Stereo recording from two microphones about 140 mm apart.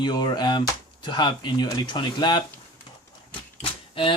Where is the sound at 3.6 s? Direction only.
40° left (ahead or behind).